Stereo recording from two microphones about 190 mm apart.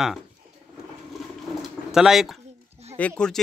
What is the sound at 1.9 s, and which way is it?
Speech, centre (ahead or behind).